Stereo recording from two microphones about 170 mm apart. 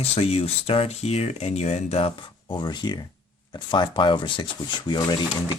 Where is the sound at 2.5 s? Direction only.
25° left (ahead or behind).